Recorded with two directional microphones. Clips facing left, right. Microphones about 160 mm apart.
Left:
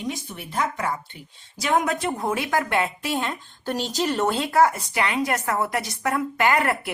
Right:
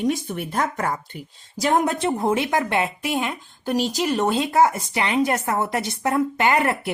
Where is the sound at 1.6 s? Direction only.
30° right (ahead or behind).